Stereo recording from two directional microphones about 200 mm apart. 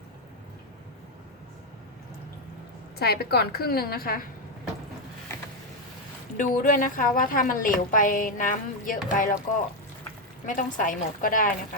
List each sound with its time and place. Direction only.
3.0 s a woman's voice: 50° left (ahead or behind)
6.3 s a woman's voice: 40° left (ahead or behind)
10.4 s a woman's voice: 40° left (ahead or behind)